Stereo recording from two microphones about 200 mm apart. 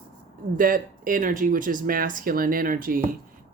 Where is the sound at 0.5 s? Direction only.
45° right (ahead or behind).